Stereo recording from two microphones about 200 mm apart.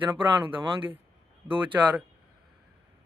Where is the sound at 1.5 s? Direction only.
10° right (ahead or behind).